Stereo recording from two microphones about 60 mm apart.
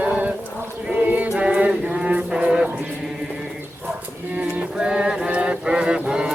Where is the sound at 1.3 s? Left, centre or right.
Centre.